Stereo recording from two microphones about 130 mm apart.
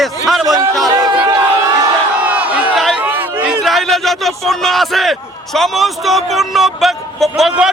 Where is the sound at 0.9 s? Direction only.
30° right (ahead or behind).